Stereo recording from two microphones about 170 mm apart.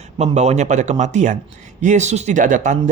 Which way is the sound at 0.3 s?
40° right (ahead or behind).